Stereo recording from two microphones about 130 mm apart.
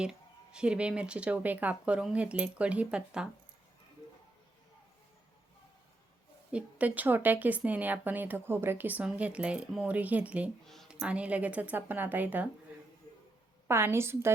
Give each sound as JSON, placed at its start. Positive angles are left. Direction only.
{"t": 0.0, "sound": "speech", "side_deg": -5}
{"t": 6.5, "sound": "speech", "side_deg": -10}
{"t": 10.7, "sound": "a sound", "side_deg": 0}
{"t": 11.0, "sound": "speech", "side_deg": -10}
{"t": 13.7, "sound": "a woman's voice", "side_deg": -20}